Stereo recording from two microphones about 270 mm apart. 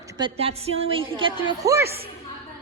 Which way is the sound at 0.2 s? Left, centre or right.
Centre.